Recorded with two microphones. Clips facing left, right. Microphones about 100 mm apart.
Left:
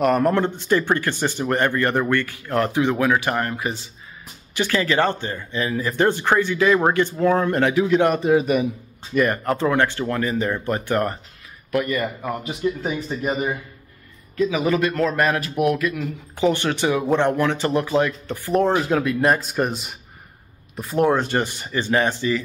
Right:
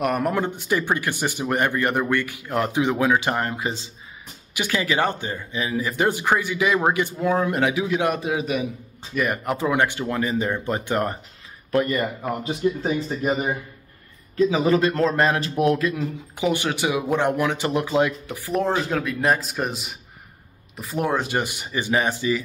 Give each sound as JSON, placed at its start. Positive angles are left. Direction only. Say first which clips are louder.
{"t": 0.0, "sound": "speech", "louder": "left 4 dB", "side_deg": -10}
{"t": 11.7, "sound": "speech", "louder": "right 1 dB", "side_deg": -35}
{"t": 14.3, "sound": "a man's voice", "louder": "right 1 dB", "side_deg": -30}
{"t": 16.3, "sound": "speech", "louder": "left 3 dB", "side_deg": -10}